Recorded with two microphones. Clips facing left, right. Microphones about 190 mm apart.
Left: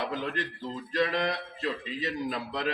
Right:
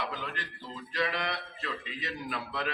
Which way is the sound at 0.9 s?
45° left (ahead or behind).